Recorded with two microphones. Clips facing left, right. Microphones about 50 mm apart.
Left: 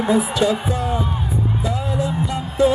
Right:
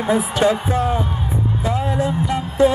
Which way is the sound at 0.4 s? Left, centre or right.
Right.